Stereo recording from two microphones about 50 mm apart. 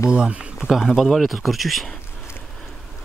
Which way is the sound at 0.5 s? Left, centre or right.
Centre.